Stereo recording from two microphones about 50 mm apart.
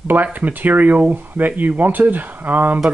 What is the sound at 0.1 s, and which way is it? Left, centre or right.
Speech, right.